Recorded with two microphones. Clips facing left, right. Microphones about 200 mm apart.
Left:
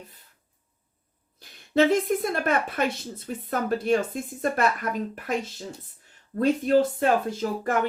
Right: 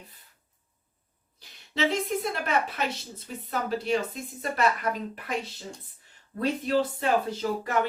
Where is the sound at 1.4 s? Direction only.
50° left (ahead or behind).